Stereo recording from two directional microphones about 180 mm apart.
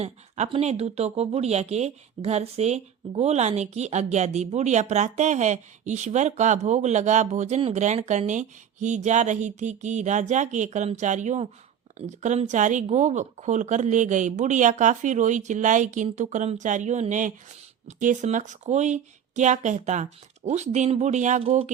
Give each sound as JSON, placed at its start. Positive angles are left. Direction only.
{"t": 0.0, "sound": "speech", "side_deg": -35}